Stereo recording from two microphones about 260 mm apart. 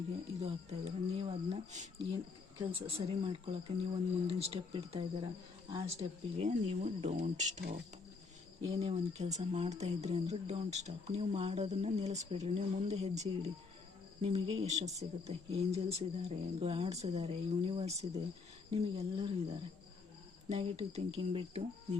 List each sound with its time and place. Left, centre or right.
0.3 s speech: right